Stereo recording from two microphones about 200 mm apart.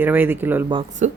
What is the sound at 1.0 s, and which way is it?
Speech, 35° right (ahead or behind).